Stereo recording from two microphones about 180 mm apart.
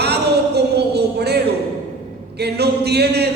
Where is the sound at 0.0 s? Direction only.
65° right (ahead or behind).